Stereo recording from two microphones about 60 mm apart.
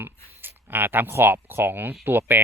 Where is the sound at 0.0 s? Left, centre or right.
Right.